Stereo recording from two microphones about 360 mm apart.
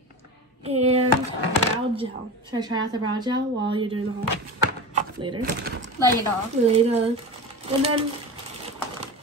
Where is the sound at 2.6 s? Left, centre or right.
Centre.